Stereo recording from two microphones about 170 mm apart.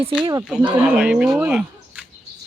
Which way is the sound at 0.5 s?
5° right (ahead or behind).